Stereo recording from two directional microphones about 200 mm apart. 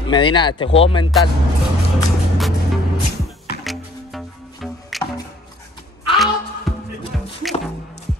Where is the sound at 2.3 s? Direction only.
Centre (ahead or behind).